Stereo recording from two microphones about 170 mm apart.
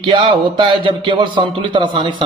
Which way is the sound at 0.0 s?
30° right (ahead or behind).